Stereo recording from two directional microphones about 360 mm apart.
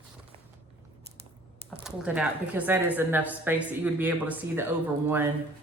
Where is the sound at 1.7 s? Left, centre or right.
Centre.